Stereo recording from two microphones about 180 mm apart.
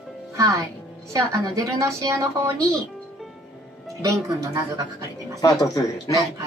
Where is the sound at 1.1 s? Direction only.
20° right (ahead or behind).